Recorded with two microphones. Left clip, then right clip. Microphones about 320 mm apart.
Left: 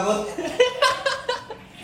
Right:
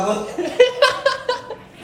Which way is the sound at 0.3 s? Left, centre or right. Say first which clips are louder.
Right 8 dB; centre.